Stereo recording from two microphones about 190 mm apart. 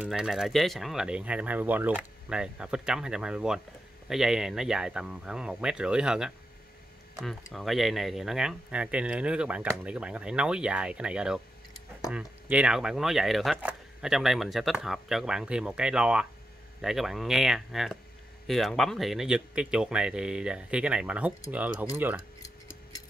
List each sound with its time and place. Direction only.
0.0 s speech: 5° right (ahead or behind)